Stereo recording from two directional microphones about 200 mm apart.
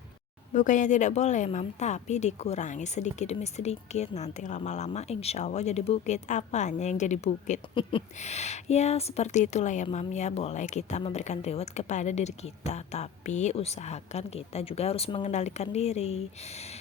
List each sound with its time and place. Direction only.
0.5 s speech: 40° left (ahead or behind)
7.8 s speech: 25° left (ahead or behind)